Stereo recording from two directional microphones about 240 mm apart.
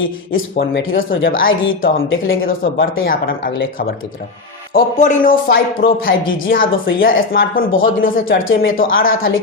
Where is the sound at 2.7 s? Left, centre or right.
Left.